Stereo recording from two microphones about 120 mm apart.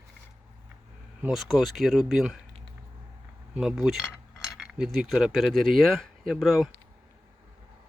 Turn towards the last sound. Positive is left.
turn(degrees=0)  # may be behind; listen again after turning